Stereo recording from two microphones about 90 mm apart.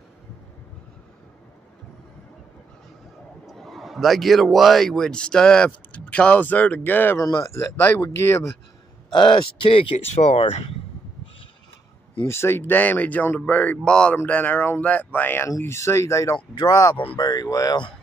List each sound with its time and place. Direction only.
3.4 s a man's voice: centre (ahead or behind); by 7.2 s 20° left (ahead or behind)
7.2 s speech: 40° left (ahead or behind)
7.7 s speech: 25° left (ahead or behind)
9.1 s speech: 65° left (ahead or behind); by 10.5 s 90° left
12.3 s speech: 30° left (ahead or behind)
15.4 s speech: 35° left (ahead or behind)
16.5 s speech: 45° left (ahead or behind)